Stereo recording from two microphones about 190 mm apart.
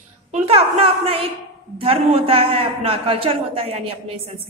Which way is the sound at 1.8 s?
30° right (ahead or behind).